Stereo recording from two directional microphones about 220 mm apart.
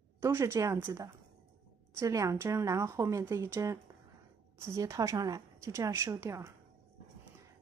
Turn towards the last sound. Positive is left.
turn(degrees=-15)  # may be behind; listen again after turning